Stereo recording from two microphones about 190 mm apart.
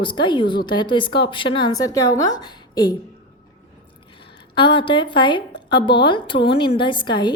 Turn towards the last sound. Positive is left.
turn(degrees=25)  # may be behind; listen again after turning